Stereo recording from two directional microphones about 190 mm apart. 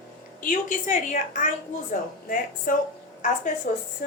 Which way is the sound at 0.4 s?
40° left (ahead or behind).